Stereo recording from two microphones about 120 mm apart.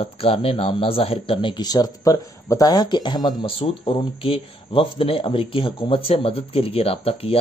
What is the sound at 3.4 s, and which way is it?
Speech, 50° left (ahead or behind).